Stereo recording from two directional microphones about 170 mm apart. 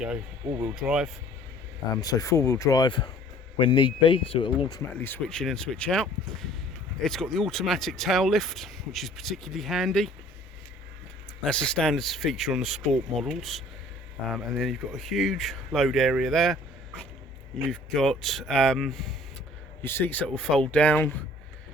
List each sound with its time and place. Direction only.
0.6 s speech: 5° right (ahead or behind)
2.0 s speech: 20° left (ahead or behind)
4.8 s speech: 10° left (ahead or behind)
11.4 s speech: 5° left (ahead or behind)
17.7 s speech: 5° left (ahead or behind)
19.8 s speech: 15° left (ahead or behind)